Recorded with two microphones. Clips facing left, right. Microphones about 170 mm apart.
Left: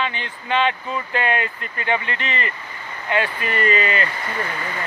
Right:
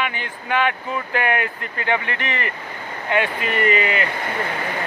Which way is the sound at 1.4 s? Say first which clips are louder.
Right 1 dB; 80° right.